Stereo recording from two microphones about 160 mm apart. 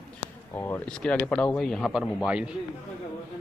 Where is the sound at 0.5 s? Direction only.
15° left (ahead or behind); by 2.6 s 5° right (ahead or behind).